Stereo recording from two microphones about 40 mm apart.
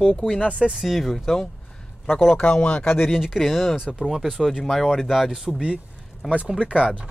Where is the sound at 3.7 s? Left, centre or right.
Centre.